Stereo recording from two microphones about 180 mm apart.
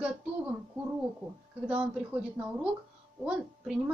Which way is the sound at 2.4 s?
10° right (ahead or behind).